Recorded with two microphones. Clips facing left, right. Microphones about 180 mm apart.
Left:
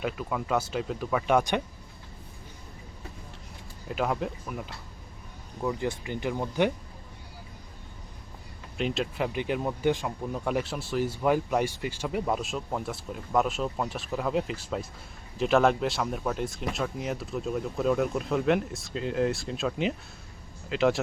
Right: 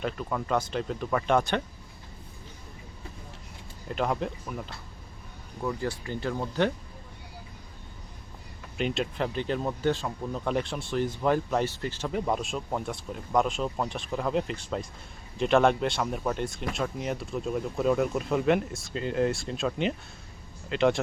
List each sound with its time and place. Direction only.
0.0 s speech: 5° left (ahead or behind)
3.8 s speech: 5° left (ahead or behind)
5.6 s speech: 20° left (ahead or behind)
8.8 s speech: 5° left (ahead or behind)